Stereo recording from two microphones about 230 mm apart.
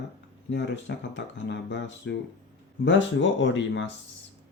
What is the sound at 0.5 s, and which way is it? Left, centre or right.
Speech, left.